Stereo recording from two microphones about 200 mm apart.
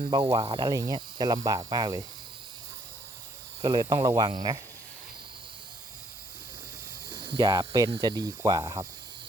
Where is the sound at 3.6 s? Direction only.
20° right (ahead or behind).